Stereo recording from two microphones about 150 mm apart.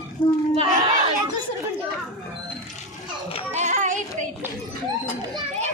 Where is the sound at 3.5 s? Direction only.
50° right (ahead or behind).